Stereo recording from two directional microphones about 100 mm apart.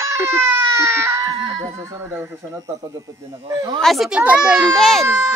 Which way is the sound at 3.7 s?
Centre (ahead or behind).